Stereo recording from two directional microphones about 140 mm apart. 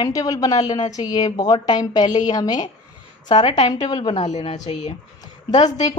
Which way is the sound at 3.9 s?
40° left (ahead or behind).